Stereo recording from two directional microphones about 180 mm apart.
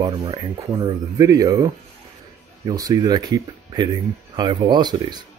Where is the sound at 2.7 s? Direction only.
20° right (ahead or behind).